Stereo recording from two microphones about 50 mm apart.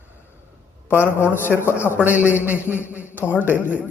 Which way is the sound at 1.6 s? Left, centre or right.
Left.